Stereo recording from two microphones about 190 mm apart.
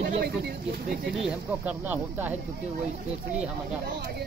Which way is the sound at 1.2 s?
10° right (ahead or behind).